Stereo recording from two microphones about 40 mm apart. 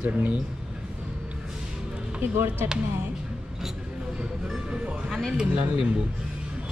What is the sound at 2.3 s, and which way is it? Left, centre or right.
Speech, right.